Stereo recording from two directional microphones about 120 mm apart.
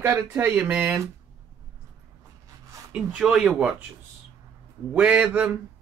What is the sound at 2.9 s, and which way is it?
Speech, 5° right (ahead or behind).